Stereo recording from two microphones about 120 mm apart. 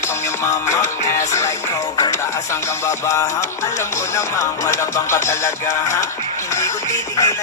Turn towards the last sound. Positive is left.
turn(degrees=30)  # may be behind; listen again after turning